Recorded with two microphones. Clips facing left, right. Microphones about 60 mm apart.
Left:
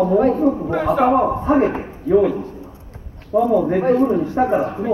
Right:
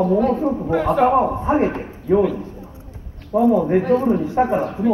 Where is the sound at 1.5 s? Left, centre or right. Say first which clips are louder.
Left 5 dB; right.